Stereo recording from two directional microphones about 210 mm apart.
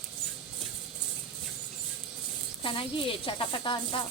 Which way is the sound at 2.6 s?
25° left (ahead or behind).